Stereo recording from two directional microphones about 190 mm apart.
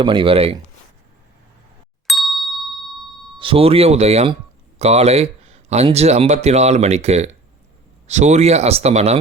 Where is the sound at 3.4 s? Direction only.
30° right (ahead or behind).